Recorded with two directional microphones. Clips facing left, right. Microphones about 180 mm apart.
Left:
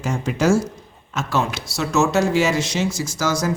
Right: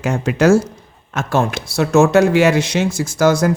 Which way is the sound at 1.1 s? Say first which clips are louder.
Right 4 dB; 55° right (ahead or behind).